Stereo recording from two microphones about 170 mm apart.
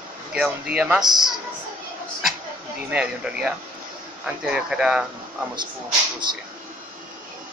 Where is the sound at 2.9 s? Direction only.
5° right (ahead or behind).